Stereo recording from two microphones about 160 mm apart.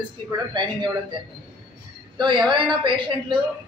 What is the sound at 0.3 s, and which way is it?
Speech, 25° right (ahead or behind).